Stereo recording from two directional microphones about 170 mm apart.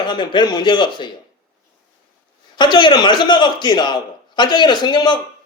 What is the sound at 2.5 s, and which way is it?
A man's voice, 25° left (ahead or behind).